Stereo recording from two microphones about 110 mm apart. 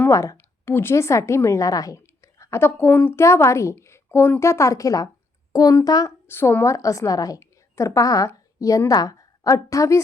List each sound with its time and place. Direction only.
0.1 s a woman's voice: 25° left (ahead or behind)
6.2 s a woman's voice: 20° left (ahead or behind)